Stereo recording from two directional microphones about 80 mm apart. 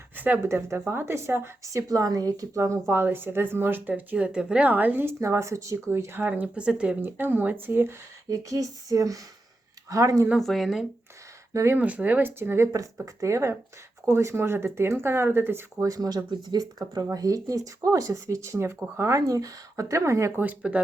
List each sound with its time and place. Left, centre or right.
0.4 s a woman's voice: right
5.2 s a woman's voice: right; by 6.9 s centre
7.0 s a woman's voice: right
8.3 s speech: right
10.4 s speech: centre
11.5 s speech: right
11.8 s a woman's voice: centre
15.8 s speech: right
20.4 s speech: centre